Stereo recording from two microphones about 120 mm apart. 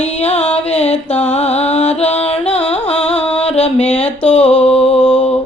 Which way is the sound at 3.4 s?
60° left (ahead or behind).